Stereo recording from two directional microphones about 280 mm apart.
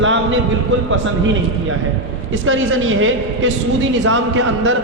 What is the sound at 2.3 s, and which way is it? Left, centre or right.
A man's voice, right.